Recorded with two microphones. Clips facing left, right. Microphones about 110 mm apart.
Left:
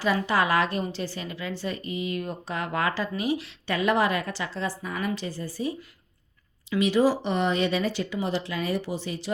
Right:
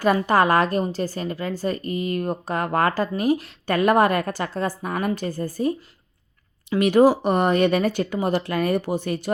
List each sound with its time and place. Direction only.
0.0 s a woman's voice: 50° right (ahead or behind)